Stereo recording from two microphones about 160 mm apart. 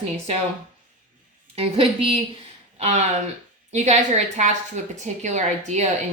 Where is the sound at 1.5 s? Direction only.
35° right (ahead or behind).